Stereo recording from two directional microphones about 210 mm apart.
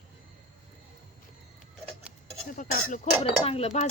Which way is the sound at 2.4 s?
35° left (ahead or behind).